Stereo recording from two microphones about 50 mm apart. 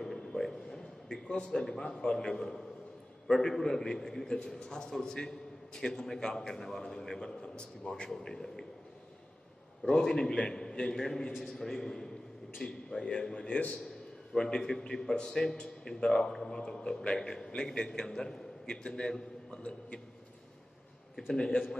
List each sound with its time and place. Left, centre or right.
0.0 s a sound: centre
3.3 s a man's voice: centre
9.8 s a man's voice: centre
21.3 s a man's voice: centre